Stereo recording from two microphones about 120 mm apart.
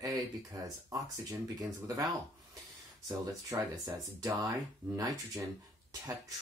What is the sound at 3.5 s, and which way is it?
Speech, 30° right (ahead or behind).